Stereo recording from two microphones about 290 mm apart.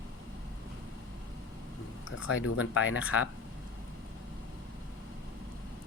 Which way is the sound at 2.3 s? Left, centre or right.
Left.